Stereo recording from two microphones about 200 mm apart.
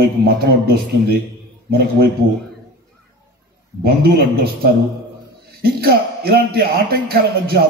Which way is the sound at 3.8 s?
50° right (ahead or behind).